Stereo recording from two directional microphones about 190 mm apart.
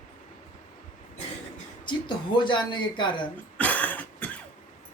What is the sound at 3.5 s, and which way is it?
Cough, 10° left (ahead or behind).